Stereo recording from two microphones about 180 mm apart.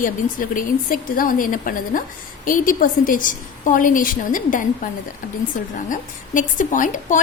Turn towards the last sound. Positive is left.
turn(degrees=45)  # may be behind; listen again after turning